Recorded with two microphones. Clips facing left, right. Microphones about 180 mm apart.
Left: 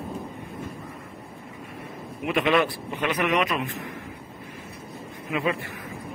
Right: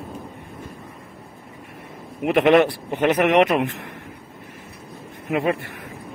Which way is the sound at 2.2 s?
60° right (ahead or behind).